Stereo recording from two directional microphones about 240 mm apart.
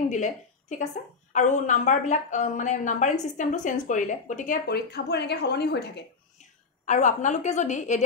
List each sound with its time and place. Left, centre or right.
0.1 s a woman's voice: left
6.9 s a woman's voice: left